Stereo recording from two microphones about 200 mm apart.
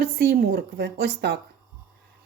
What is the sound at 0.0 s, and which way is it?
Speech, 50° right (ahead or behind).